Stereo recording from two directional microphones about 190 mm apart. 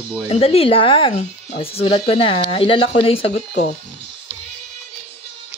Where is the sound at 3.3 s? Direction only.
55° left (ahead or behind).